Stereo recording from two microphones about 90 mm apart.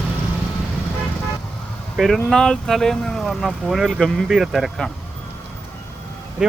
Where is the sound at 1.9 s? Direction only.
Centre (ahead or behind).